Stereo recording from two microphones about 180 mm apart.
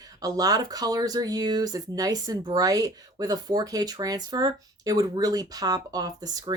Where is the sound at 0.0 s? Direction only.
20° right (ahead or behind).